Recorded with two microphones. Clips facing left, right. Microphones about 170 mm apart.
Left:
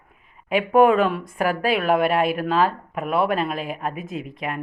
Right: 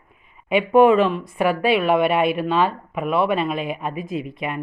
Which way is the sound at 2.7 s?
Centre (ahead or behind).